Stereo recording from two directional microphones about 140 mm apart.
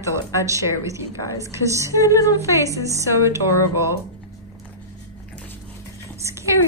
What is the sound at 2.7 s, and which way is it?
Speech, 25° right (ahead or behind).